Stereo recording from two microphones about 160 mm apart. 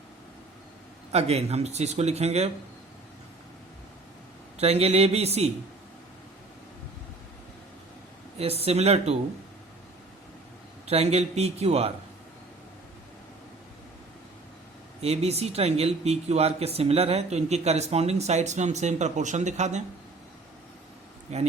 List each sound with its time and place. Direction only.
1.1 s speech: 40° right (ahead or behind)
4.5 s a man's voice: 40° right (ahead or behind)
8.4 s a man's voice: 40° right (ahead or behind)
10.8 s a man's voice: 40° right (ahead or behind)
15.0 s speech: 40° right (ahead or behind)
21.3 s speech: 45° right (ahead or behind)